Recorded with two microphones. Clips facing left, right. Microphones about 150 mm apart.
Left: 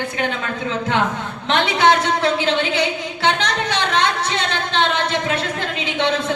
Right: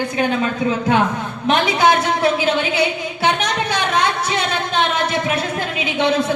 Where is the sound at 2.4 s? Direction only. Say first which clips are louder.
Right 1 dB; 10° right (ahead or behind).